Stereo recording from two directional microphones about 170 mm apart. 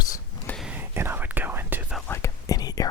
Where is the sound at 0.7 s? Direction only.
10° right (ahead or behind).